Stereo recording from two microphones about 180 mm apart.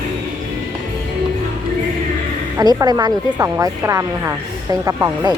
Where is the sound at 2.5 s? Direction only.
20° right (ahead or behind).